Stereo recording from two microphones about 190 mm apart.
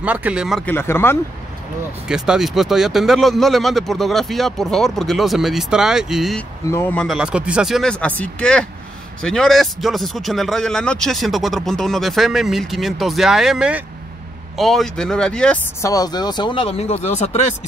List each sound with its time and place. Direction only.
0.0 s speech: 10° right (ahead or behind)
0.7 s speech: 10° left (ahead or behind)
2.0 s speech: 5° right (ahead or behind)
6.7 s speech: 10° left (ahead or behind)
15.8 s speech: 20° left (ahead or behind); by 17.5 s 35° left (ahead or behind)